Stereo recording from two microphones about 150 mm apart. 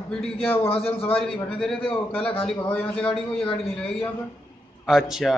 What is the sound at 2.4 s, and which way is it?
A man's voice, 5° left (ahead or behind).